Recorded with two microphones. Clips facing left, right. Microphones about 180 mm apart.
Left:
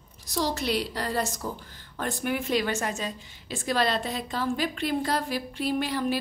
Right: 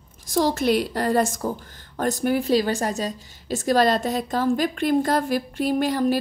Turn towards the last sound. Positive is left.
turn(degrees=-45)  # may be behind; listen again after turning